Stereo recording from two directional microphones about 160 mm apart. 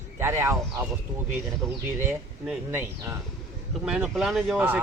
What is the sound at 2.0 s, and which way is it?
Speech, 10° right (ahead or behind).